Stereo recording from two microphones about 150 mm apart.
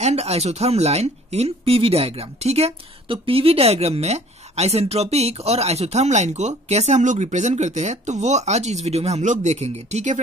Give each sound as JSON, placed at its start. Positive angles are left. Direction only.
{"t": 0.0, "sound": "speech", "side_deg": -45}